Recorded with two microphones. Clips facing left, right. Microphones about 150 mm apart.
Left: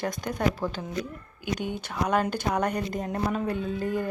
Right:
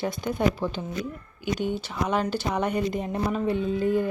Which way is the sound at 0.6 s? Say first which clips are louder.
Right 1 dB; 10° left (ahead or behind).